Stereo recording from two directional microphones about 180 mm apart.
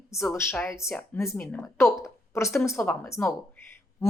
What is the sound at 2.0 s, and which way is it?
A woman's voice, 15° left (ahead or behind).